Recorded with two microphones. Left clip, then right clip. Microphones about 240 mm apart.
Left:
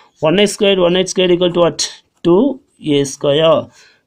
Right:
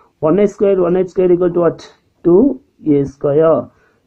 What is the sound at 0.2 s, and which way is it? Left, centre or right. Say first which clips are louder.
Speech: even; left.